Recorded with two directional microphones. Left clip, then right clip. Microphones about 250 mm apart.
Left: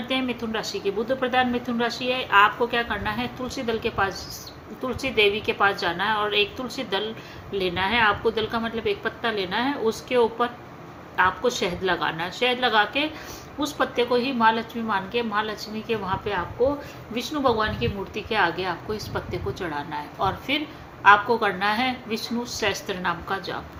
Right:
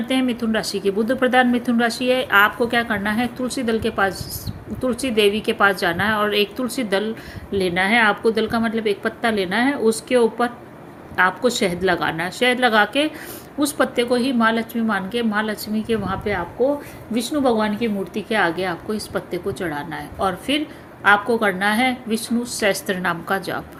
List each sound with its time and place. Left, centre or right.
0.1 s a woman's voice: right